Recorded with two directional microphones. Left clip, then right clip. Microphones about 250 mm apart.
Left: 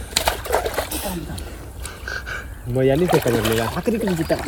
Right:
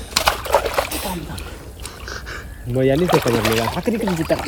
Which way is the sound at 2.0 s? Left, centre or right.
Centre.